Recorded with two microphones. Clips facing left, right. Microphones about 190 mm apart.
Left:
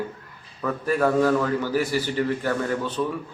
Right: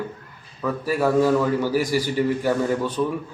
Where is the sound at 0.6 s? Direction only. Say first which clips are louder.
Even; 5° right (ahead or behind).